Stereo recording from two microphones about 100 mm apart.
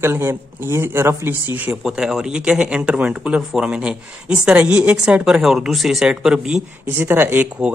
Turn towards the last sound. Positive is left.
turn(degrees=-20)  # may be behind; listen again after turning